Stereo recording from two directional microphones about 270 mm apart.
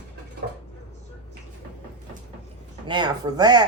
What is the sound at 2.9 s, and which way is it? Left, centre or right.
Speech, centre.